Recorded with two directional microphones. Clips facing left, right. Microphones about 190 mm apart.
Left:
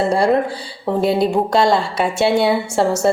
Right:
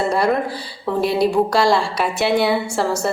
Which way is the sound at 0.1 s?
30° left (ahead or behind).